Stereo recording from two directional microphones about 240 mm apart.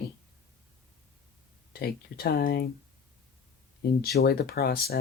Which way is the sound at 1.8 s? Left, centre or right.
Left.